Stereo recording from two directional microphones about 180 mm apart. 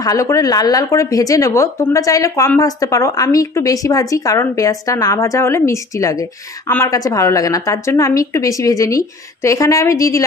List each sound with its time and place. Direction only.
0.0 s a woman's voice: 20° left (ahead or behind)